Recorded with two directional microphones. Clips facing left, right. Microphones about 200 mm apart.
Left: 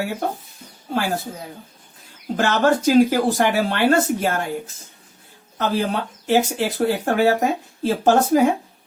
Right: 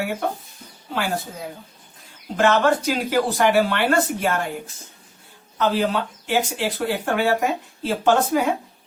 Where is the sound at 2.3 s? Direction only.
40° left (ahead or behind).